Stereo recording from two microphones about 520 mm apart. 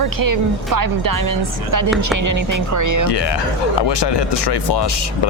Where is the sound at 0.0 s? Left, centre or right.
Right.